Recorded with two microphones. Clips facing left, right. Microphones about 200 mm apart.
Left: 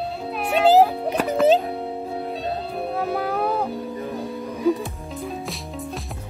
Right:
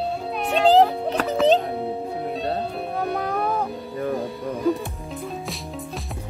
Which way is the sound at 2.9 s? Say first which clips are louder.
Left 1 dB; 5° left (ahead or behind).